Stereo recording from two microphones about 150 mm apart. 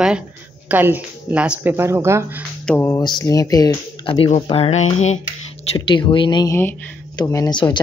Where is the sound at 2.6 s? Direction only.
10° left (ahead or behind).